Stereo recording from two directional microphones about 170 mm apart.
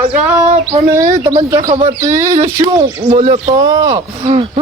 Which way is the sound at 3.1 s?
40° right (ahead or behind).